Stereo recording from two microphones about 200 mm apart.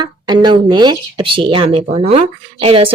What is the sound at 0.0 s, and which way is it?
Speech, 20° right (ahead or behind).